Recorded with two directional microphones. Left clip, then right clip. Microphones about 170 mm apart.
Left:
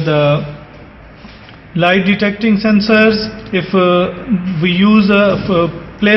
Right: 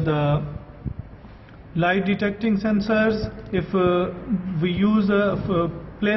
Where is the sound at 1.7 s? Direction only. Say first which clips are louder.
Left 10 dB; 15° left (ahead or behind).